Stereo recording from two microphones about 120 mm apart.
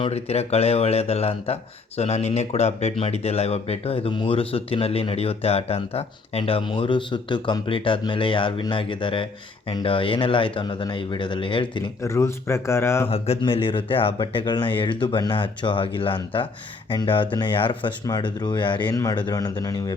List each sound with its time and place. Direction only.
0.0 s speech: 60° left (ahead or behind)
12.0 s a man's voice: 25° left (ahead or behind)
13.1 s speech: 55° left (ahead or behind)
13.4 s speech: 45° left (ahead or behind)
18.0 s speech: 30° left (ahead or behind)